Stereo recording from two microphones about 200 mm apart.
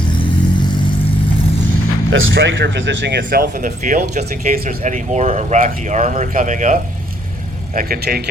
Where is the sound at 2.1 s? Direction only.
70° right (ahead or behind).